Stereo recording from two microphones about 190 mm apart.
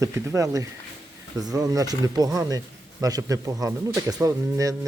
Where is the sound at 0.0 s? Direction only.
15° right (ahead or behind).